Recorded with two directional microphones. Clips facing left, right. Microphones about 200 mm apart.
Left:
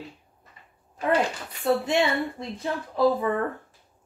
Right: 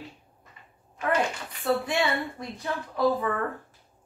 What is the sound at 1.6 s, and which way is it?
Speech, 25° left (ahead or behind).